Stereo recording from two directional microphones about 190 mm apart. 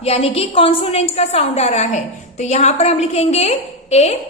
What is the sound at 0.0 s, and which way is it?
A woman's voice, 30° left (ahead or behind).